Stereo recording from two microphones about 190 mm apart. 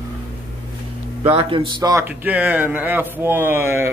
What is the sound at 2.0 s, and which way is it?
A man's voice, 10° right (ahead or behind).